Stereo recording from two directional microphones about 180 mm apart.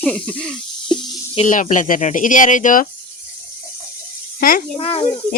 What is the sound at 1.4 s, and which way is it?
Speech, 45° left (ahead or behind).